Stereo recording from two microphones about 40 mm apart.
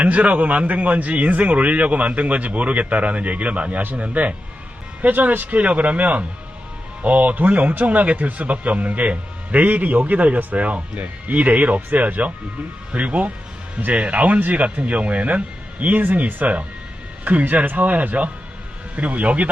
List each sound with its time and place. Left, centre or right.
0.0 s a man's voice: right
5.0 s a man's voice: right
17.7 s a man's voice: right